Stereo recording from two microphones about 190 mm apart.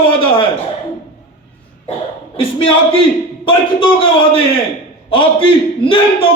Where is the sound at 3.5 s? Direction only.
25° left (ahead or behind).